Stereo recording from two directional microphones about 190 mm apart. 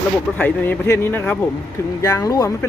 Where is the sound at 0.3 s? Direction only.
10° left (ahead or behind).